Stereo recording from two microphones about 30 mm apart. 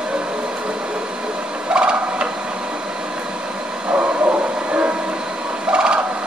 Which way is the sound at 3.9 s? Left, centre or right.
Right.